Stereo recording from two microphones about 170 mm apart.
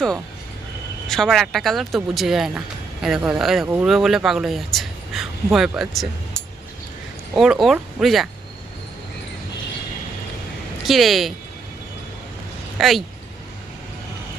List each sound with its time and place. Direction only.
1.0 s speech: centre (ahead or behind)
10.8 s speech: centre (ahead or behind)
12.8 s speech: centre (ahead or behind)